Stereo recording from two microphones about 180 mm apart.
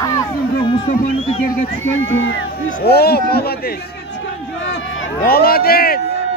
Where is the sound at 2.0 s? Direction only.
90° left; by 3.7 s 60° left (ahead or behind).